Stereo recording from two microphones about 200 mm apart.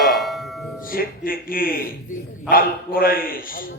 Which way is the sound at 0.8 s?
45° left (ahead or behind).